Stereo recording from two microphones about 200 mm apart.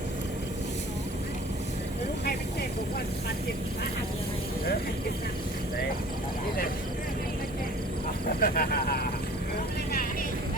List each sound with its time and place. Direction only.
8.4 s speech: 45° left (ahead or behind)